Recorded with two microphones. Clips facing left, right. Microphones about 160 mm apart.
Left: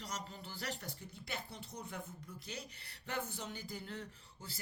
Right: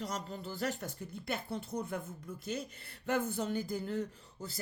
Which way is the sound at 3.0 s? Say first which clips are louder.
Right 9 dB; 50° right (ahead or behind).